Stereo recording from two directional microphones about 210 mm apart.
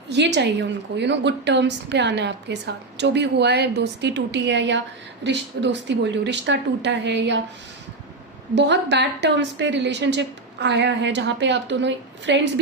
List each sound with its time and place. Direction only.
0.1 s a woman's voice: 55° right (ahead or behind)
8.5 s a woman's voice: 55° right (ahead or behind)